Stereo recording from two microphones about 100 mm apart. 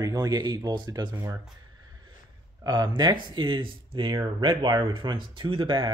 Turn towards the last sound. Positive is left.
turn(degrees=-55)  # may be behind; listen again after turning